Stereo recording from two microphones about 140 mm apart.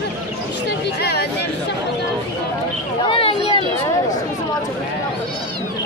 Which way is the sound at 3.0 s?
40° left (ahead or behind).